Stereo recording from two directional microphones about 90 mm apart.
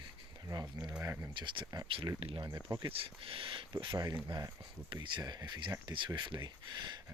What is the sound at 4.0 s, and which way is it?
Speech, 45° right (ahead or behind).